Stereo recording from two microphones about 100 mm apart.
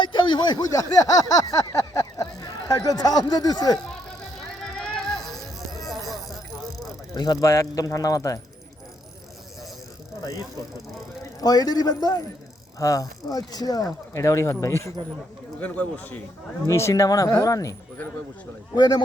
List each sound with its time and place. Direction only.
0.0 s speech: 50° left (ahead or behind)
4.8 s music: 5° left (ahead or behind)
7.4 s speech: 35° left (ahead or behind)
11.3 s a man's voice: 40° left (ahead or behind)
15.6 s a man's voice: 15° left (ahead or behind)
16.6 s speech: 30° left (ahead or behind)